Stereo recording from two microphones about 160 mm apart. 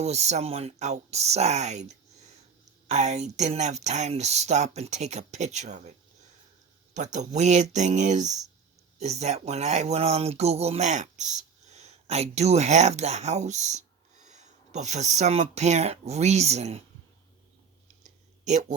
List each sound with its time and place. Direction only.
0.0 s speech: 45° right (ahead or behind)
6.9 s speech: 50° right (ahead or behind)